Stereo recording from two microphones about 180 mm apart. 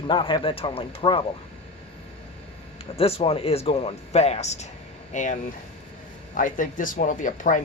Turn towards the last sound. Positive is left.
turn(degrees=45)  # may be behind; listen again after turning